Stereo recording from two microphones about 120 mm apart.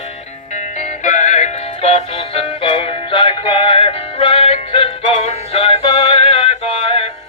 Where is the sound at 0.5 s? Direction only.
75° left (ahead or behind).